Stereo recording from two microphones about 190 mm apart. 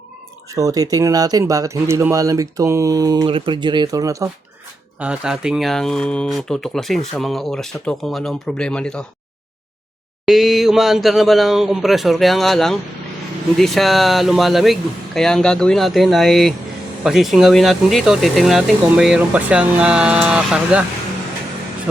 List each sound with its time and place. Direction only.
0.5 s speech: 20° right (ahead or behind)
4.9 s speech: 5° right (ahead or behind)
10.2 s speech: centre (ahead or behind)